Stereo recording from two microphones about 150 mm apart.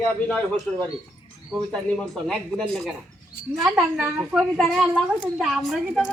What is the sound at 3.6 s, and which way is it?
Speech, 20° right (ahead or behind).